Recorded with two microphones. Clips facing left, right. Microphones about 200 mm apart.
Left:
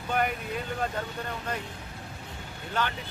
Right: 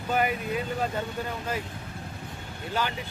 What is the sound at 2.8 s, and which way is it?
Speech, 10° right (ahead or behind).